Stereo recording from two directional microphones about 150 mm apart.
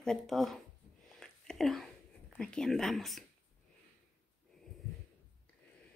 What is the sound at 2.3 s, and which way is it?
Speech, 5° left (ahead or behind).